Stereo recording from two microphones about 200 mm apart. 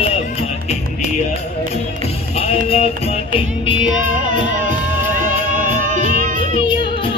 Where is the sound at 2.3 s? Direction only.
30° left (ahead or behind).